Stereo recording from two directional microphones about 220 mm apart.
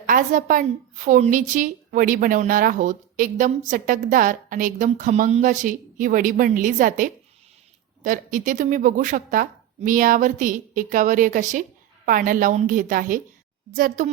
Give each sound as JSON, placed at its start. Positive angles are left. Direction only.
{"t": 0.0, "sound": "a woman's voice", "side_deg": -35}